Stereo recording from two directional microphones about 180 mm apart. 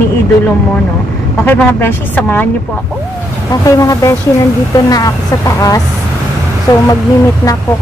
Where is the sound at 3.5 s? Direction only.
20° left (ahead or behind).